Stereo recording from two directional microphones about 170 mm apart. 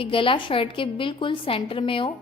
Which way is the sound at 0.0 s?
30° left (ahead or behind).